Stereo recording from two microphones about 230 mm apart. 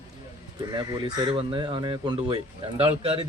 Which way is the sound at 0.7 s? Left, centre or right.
Centre.